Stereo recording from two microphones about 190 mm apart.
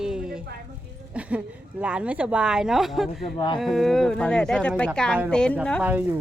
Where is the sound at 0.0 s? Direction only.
5° right (ahead or behind).